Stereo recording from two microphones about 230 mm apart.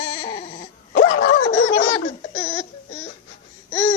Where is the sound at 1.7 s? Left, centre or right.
Left.